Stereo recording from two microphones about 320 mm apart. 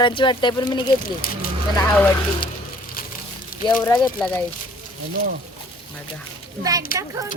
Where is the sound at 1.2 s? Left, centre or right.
Left.